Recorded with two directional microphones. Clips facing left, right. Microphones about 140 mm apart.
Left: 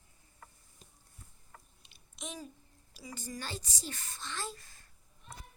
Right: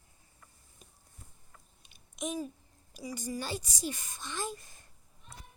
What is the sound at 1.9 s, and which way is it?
Babbling, 15° right (ahead or behind).